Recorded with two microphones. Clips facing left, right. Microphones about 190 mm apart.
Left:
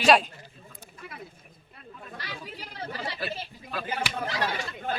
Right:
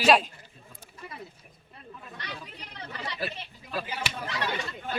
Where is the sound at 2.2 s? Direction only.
5° left (ahead or behind).